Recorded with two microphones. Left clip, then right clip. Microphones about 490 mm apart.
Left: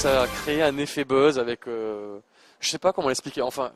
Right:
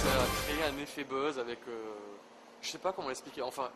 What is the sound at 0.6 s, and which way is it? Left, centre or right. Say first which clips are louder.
Speech: left 12 dB; left.